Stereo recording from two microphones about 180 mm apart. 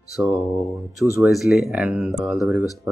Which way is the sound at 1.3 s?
Centre (ahead or behind).